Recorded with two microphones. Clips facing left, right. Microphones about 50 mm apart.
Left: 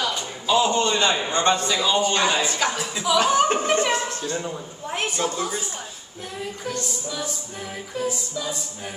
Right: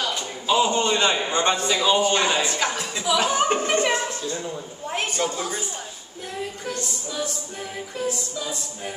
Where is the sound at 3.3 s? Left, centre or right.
Centre.